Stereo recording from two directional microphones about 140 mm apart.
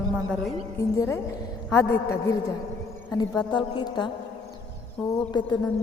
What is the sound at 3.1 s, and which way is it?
Speech, 30° left (ahead or behind).